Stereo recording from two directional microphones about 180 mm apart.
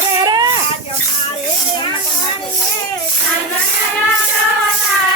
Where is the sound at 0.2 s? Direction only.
25° right (ahead or behind).